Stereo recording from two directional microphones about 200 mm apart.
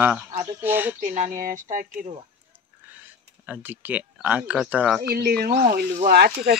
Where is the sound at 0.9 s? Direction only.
40° right (ahead or behind).